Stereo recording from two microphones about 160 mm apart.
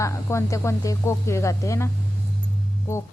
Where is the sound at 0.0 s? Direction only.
20° left (ahead or behind).